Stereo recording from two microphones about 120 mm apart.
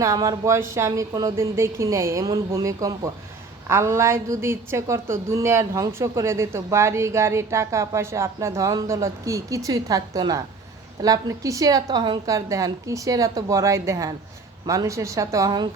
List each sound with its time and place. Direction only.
0.0 s a woman's voice: 30° right (ahead or behind)
12.3 s a woman's voice: 25° right (ahead or behind)